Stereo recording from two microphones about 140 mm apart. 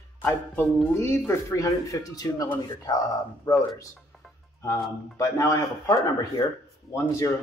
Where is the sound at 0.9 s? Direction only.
20° left (ahead or behind).